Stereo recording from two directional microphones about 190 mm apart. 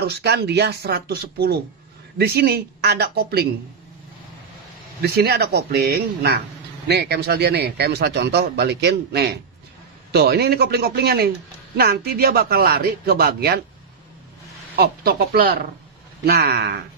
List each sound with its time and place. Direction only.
0.0 s speech: 60° right (ahead or behind)
5.0 s speech: 55° right (ahead or behind)
14.8 s speech: 55° right (ahead or behind)